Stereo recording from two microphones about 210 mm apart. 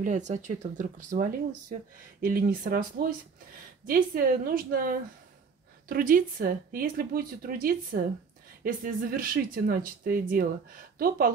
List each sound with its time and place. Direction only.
0.0 s speech: 35° right (ahead or behind)